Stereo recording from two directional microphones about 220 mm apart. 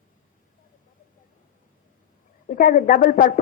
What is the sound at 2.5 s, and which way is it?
Speech, 35° left (ahead or behind).